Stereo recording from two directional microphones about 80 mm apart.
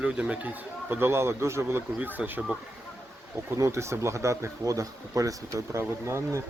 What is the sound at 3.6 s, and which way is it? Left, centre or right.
Speech, right.